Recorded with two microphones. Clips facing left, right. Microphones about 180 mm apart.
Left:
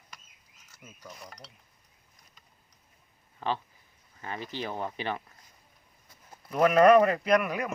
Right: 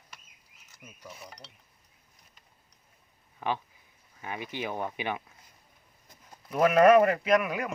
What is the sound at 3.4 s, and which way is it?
Speech, 15° right (ahead or behind).